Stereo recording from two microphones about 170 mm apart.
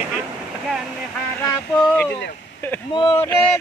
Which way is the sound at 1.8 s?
10° left (ahead or behind).